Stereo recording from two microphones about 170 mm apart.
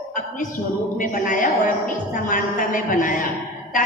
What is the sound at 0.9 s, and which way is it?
A woman's voice, 50° left (ahead or behind).